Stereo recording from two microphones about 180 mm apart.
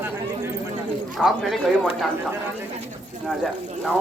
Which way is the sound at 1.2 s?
Centre (ahead or behind).